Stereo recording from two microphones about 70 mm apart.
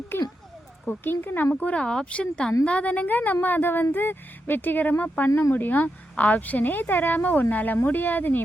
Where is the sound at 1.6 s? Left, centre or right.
Centre.